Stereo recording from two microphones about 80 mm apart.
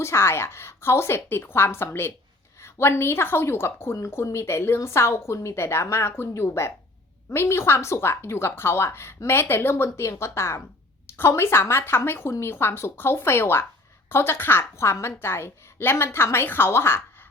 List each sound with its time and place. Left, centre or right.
0.0 s a woman's voice: left